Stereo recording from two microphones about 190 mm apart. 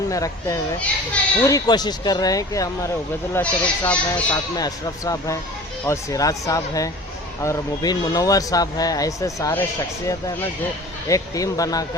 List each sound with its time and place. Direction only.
0.1 s speech: 15° left (ahead or behind)